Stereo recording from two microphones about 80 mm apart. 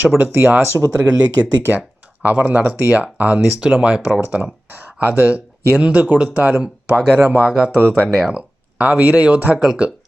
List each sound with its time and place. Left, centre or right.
0.2 s speech: right
0.8 s speech: right
2.2 s speech: right
7.9 s speech: centre
8.1 s speech: centre